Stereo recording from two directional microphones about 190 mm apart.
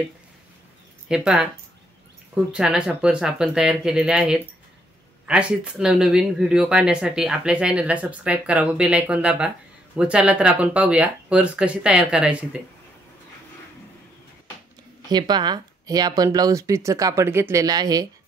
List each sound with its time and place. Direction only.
1.0 s speech: 5° right (ahead or behind)
15.0 s speech: 20° right (ahead or behind)